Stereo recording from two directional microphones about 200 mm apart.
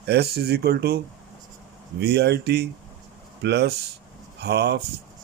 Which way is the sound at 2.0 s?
55° right (ahead or behind).